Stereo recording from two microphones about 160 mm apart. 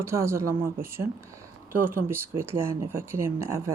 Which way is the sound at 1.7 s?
15° right (ahead or behind).